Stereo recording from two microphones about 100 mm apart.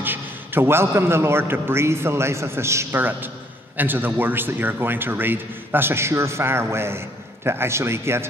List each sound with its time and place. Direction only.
0.0 s a man's voice: 20° right (ahead or behind)